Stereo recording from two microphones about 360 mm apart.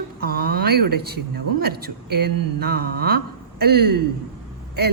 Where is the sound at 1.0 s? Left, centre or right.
Right.